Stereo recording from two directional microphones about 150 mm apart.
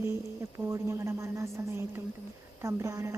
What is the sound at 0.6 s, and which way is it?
Speech, 20° right (ahead or behind).